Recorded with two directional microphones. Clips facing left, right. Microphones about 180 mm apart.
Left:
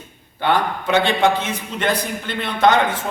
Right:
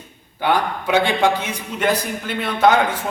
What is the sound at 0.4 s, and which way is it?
A man's voice, 10° right (ahead or behind).